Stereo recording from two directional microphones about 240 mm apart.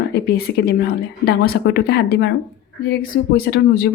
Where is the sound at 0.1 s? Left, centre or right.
Left.